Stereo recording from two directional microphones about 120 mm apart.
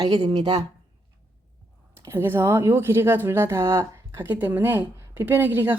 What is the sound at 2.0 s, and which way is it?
Speech, 20° right (ahead or behind).